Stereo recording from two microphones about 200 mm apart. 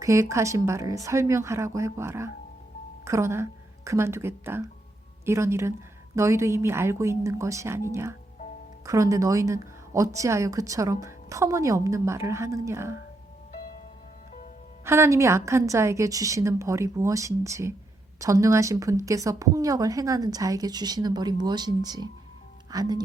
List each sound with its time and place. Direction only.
0.0 s a woman's voice: 15° right (ahead or behind)
14.8 s a woman's voice: 15° right (ahead or behind)